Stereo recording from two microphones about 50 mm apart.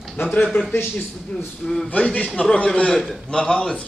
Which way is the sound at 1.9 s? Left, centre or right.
Left.